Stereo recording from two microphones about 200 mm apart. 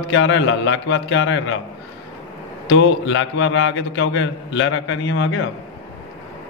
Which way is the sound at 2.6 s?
65° left (ahead or behind).